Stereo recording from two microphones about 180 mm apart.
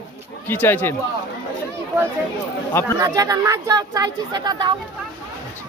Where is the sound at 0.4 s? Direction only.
10° left (ahead or behind).